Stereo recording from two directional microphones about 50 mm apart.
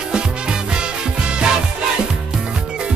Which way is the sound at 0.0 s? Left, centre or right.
Centre.